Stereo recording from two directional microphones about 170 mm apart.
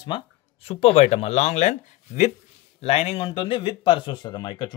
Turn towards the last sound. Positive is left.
turn(degrees=25)  # may be behind; listen again after turning